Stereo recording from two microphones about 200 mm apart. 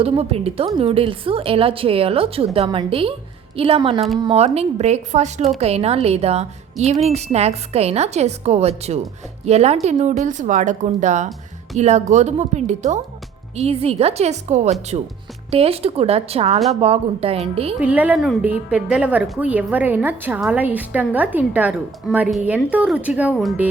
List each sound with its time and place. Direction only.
0.0 s a woman's voice: 30° right (ahead or behind)
17.7 s a woman's voice: 5° right (ahead or behind)